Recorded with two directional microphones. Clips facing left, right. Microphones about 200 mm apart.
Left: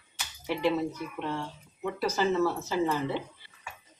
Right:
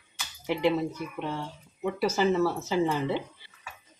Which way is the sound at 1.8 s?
10° right (ahead or behind).